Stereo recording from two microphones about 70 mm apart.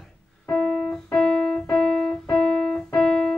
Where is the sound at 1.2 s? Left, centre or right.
Centre.